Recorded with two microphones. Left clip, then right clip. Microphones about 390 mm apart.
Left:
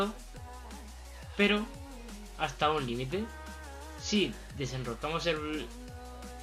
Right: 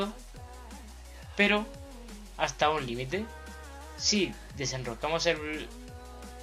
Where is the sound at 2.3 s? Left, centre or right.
Centre.